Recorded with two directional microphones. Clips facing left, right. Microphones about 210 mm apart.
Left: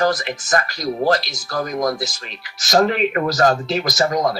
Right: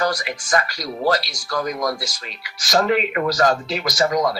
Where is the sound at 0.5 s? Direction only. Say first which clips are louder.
Left 2 dB; 45° left (ahead or behind).